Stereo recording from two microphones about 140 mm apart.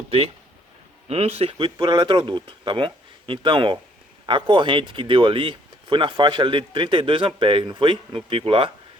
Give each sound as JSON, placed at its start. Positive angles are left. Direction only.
{"t": 1.0, "sound": "speech", "side_deg": -45}